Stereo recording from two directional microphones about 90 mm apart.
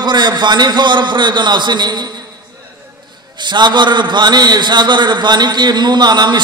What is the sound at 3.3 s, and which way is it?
A man's voice, 55° right (ahead or behind).